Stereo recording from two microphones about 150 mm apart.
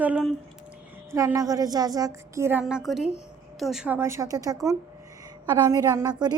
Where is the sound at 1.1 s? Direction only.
20° right (ahead or behind); by 3.9 s 5° right (ahead or behind).